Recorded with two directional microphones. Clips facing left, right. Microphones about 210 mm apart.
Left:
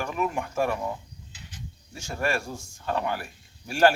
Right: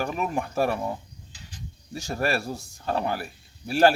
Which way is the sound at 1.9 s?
35° right (ahead or behind).